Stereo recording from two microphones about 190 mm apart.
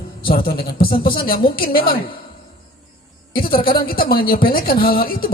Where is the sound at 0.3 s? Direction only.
50° left (ahead or behind).